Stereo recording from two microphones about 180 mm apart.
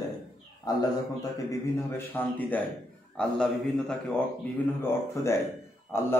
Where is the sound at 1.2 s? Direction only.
15° left (ahead or behind).